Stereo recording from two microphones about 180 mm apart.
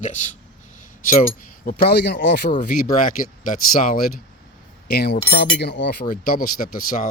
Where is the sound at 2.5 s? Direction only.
50° left (ahead or behind).